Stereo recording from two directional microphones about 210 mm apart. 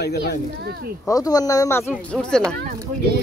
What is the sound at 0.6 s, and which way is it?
Speech, 50° right (ahead or behind).